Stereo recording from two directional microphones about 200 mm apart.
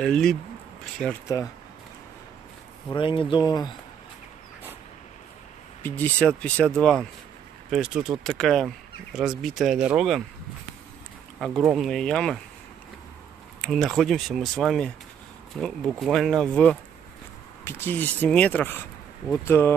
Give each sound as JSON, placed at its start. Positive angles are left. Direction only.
{"t": 0.0, "sound": "speech", "side_deg": 5}
{"t": 2.9, "sound": "speech", "side_deg": 25}
{"t": 5.8, "sound": "speech", "side_deg": 10}
{"t": 11.3, "sound": "speech", "side_deg": 0}
{"t": 13.6, "sound": "speech", "side_deg": 0}